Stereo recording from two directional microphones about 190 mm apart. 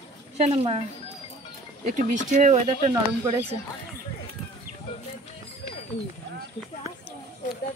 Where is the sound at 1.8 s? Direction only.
40° right (ahead or behind).